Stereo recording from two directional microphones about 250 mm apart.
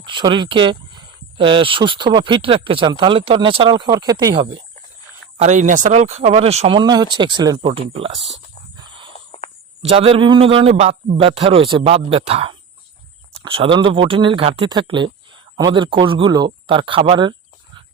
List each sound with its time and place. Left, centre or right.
0.0 s speech: centre
5.4 s speech: right
8.7 s a sound: centre
9.8 s speech: right